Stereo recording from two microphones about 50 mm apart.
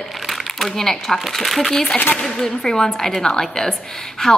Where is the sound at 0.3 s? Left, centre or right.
Centre.